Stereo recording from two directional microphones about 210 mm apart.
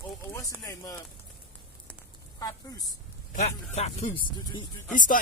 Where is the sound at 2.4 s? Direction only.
15° left (ahead or behind).